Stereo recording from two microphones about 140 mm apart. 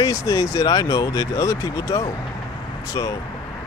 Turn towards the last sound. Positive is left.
turn(degrees=30)  # may be behind; listen again after turning